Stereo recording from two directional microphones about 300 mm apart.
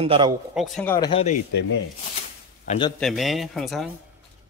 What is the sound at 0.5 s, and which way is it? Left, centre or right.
Speech, centre.